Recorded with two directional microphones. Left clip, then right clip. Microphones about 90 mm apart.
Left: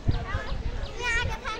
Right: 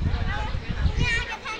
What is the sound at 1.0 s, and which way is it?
Children playing, 55° left (ahead or behind).